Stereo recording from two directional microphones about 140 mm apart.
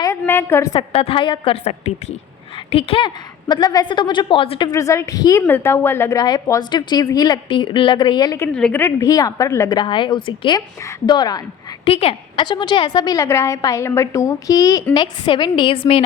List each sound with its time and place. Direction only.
0.0 s a sound: 20° left (ahead or behind)
0.8 s a woman's voice: 40° left (ahead or behind)
1.6 s a woman's voice: 55° left (ahead or behind)
2.7 s a woman's voice: 40° left (ahead or behind)
3.5 s a woman's voice: 30° left (ahead or behind)
4.7 s a woman's voice: 20° left (ahead or behind)
7.4 s a woman's voice: 35° left (ahead or behind)
8.5 s a woman's voice: 10° left (ahead or behind)
9.0 s a woman's voice: 25° left (ahead or behind)
9.7 s a woman's voice: 35° left (ahead or behind)
11.9 s a woman's voice: 45° left (ahead or behind)